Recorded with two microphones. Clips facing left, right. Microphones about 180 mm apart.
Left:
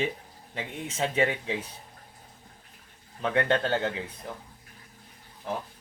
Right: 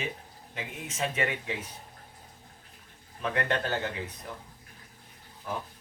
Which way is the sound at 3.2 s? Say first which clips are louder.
Left 4 dB; 30° left (ahead or behind).